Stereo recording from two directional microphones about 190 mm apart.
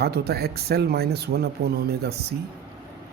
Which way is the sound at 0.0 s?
55° right (ahead or behind).